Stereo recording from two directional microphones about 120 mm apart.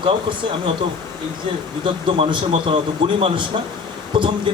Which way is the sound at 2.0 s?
45° right (ahead or behind).